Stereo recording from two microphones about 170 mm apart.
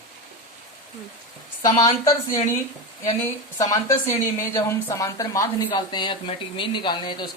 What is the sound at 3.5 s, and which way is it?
Speech, 20° left (ahead or behind).